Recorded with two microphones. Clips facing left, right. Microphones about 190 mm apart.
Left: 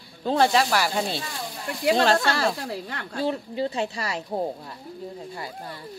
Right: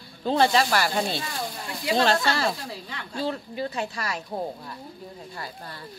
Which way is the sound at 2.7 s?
50° left (ahead or behind).